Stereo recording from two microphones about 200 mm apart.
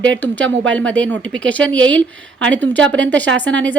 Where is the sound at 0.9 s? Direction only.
70° right (ahead or behind).